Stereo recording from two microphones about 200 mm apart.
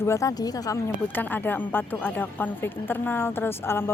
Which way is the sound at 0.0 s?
15° left (ahead or behind).